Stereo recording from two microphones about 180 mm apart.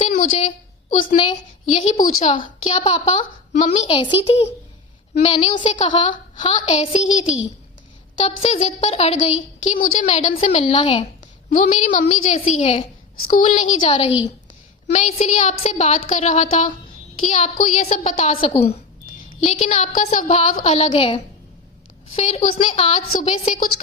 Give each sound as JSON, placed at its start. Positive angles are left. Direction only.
{"t": 0.2, "sound": "a woman's voice", "side_deg": 40}
{"t": 2.3, "sound": "a woman's voice", "side_deg": 35}
{"t": 8.2, "sound": "a woman's voice", "side_deg": 35}
{"t": 10.8, "sound": "a woman's voice", "side_deg": 25}
{"t": 11.4, "sound": "a woman's voice", "side_deg": 45}
{"t": 13.2, "sound": "a woman's voice", "side_deg": 50}